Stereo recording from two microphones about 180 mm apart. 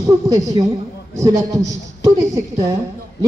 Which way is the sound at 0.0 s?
20° right (ahead or behind).